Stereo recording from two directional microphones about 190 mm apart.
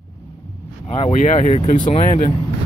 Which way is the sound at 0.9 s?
35° left (ahead or behind).